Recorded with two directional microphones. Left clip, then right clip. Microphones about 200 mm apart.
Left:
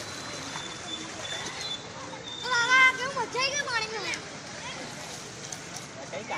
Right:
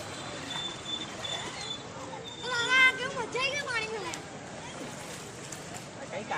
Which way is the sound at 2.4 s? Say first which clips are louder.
Left 3 dB; 25° left (ahead or behind).